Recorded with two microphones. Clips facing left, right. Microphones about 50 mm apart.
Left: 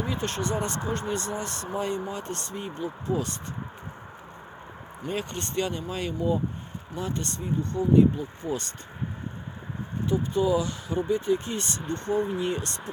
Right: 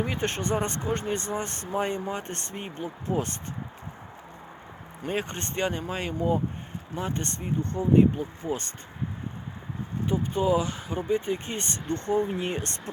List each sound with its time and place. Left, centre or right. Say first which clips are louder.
0.0 s speech: right 1 dB; right
5.0 s speech: right 1 dB; right
6.1 s speech: right 1 dB; right
6.9 s speech: even; right
10.1 s speech: left 1 dB; right